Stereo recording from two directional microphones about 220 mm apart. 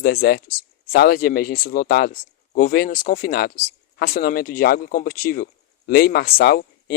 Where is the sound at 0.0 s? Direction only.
45° left (ahead or behind).